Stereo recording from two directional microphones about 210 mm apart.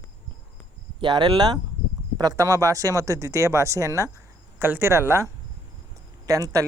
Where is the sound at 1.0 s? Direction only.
20° right (ahead or behind).